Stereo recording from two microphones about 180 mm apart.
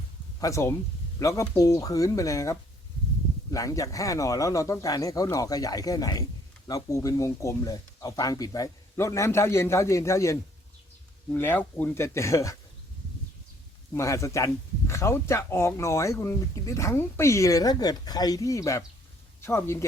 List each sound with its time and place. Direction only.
0.3 s speech: 15° left (ahead or behind)
13.9 s speech: 15° left (ahead or behind)